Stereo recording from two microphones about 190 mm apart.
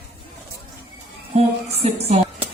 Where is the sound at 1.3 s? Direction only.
35° right (ahead or behind).